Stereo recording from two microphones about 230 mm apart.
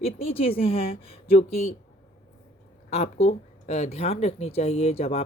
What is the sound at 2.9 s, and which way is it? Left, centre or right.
Speech, left.